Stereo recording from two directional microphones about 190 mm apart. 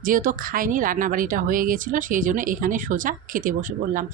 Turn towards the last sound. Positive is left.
turn(degrees=-45)  # may be behind; listen again after turning